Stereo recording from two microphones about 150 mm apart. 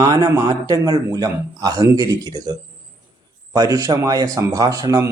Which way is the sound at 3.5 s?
25° right (ahead or behind).